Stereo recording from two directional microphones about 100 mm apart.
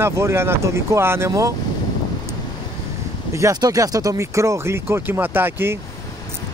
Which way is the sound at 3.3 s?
35° right (ahead or behind).